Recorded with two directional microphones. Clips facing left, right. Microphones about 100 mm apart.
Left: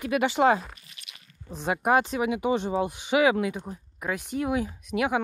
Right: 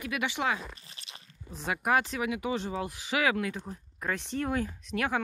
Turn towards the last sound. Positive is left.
turn(degrees=15)  # may be behind; listen again after turning